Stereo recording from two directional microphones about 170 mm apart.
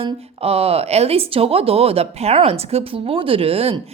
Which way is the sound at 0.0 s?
35° right (ahead or behind).